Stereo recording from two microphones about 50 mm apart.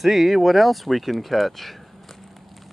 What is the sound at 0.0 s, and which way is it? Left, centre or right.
Speech, centre.